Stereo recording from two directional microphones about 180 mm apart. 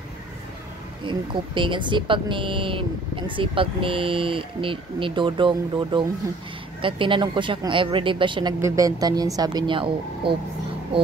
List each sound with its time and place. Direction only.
1.0 s speech: 25° right (ahead or behind)
8.5 s speech: 15° right (ahead or behind)